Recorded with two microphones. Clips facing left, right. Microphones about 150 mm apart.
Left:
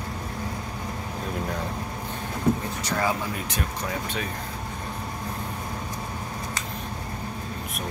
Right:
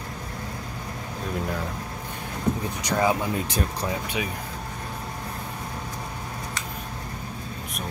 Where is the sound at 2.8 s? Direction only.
20° right (ahead or behind).